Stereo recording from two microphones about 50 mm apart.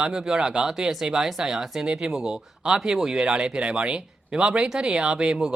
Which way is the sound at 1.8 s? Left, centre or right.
Centre.